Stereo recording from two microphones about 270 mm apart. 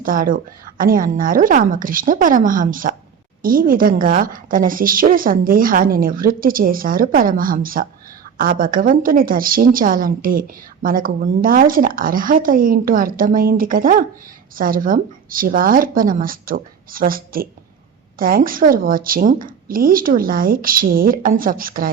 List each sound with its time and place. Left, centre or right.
0.0 s a woman's voice: right